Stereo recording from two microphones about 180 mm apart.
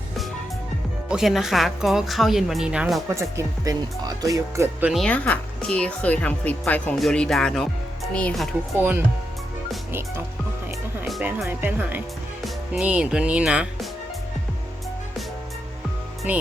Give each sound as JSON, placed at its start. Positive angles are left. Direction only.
{"t": 1.0, "sound": "speech", "side_deg": 0}
{"t": 3.2, "sound": "speech", "side_deg": -15}
{"t": 4.9, "sound": "speech", "side_deg": 5}
{"t": 11.0, "sound": "speech", "side_deg": -5}
{"t": 16.3, "sound": "speech", "side_deg": -10}